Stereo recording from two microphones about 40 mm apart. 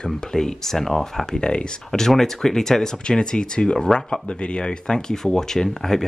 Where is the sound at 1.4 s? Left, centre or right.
Left.